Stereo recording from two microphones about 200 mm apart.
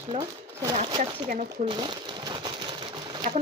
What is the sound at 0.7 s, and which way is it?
Speech, 30° right (ahead or behind).